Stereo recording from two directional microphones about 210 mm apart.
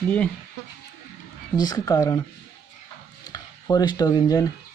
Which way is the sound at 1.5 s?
15° left (ahead or behind).